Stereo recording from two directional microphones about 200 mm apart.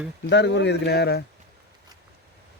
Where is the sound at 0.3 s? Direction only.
60° left (ahead or behind).